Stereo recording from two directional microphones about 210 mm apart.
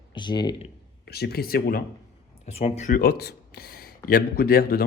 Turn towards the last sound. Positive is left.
turn(degrees=45)  # may be behind; listen again after turning